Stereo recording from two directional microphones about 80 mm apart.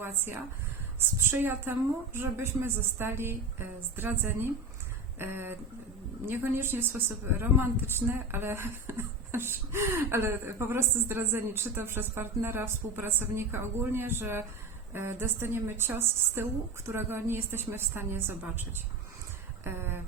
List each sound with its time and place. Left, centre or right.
0.0 s a woman's voice: right
19.6 s a woman's voice: right